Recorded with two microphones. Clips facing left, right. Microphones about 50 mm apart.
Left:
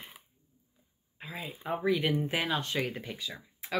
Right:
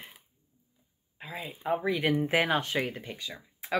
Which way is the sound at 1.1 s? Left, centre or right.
Centre.